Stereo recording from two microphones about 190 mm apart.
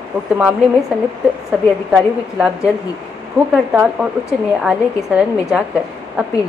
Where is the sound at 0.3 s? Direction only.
5° right (ahead or behind).